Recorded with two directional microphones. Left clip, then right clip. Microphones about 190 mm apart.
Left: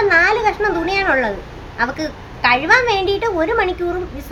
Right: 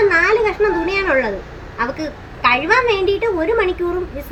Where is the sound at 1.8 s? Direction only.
15° left (ahead or behind).